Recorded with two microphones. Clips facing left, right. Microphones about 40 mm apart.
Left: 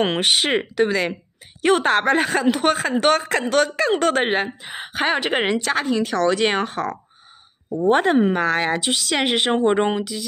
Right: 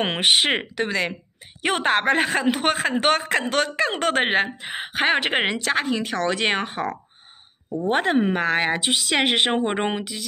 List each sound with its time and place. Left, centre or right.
0.0 s speech: right
0.7 s speech: centre
1.6 s speech: centre; by 4.7 s right
4.7 s speech: right
5.4 s speech: centre
7.9 s speech: centre
8.4 s speech: right
9.1 s speech: right
9.5 s speech: centre